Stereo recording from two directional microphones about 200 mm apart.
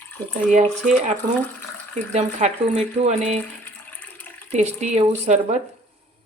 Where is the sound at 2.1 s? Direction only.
35° right (ahead or behind).